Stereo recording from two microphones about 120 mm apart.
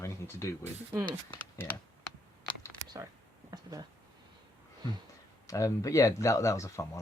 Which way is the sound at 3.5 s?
30° right (ahead or behind).